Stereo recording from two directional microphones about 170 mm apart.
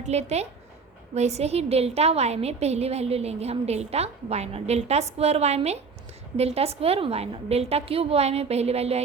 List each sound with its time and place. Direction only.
0.0 s a woman's voice: 40° right (ahead or behind)